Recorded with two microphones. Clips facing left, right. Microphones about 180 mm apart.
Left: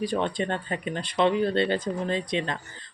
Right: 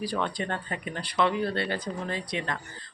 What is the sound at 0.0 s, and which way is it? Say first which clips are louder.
Speech: left 4 dB; 20° left (ahead or behind).